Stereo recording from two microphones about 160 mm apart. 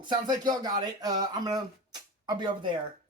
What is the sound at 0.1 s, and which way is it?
Speech, 25° right (ahead or behind).